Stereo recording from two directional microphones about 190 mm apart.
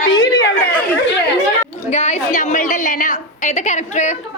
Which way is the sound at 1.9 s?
35° left (ahead or behind).